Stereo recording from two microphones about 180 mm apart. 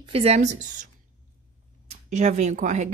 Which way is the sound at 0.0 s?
35° right (ahead or behind).